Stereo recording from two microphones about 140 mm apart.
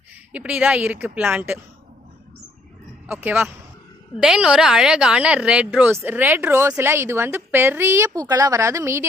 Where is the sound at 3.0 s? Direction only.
10° right (ahead or behind).